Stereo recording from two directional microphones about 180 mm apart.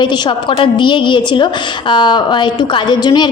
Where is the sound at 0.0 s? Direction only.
25° left (ahead or behind).